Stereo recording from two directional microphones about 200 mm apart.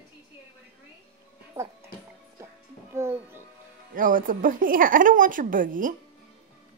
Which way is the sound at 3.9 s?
45° right (ahead or behind).